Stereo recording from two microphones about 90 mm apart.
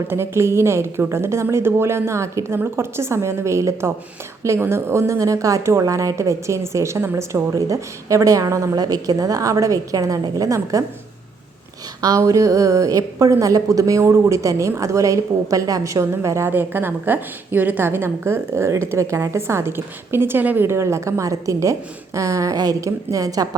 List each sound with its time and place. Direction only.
0.1 s a woman's voice: 30° right (ahead or behind)
12.0 s a woman's voice: 40° right (ahead or behind)
16.5 s a woman's voice: 25° right (ahead or behind); by 23.5 s 40° right (ahead or behind)